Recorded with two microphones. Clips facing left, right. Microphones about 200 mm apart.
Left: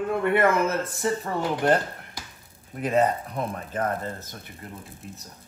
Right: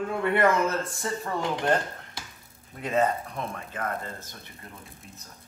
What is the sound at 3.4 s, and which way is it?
Speech, 35° left (ahead or behind).